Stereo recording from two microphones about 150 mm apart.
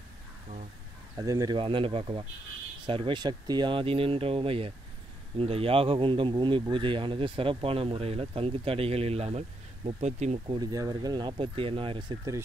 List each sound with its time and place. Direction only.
1.1 s speech: 20° right (ahead or behind)
1.6 s speech: 35° right (ahead or behind)
10.4 s speech: 30° right (ahead or behind)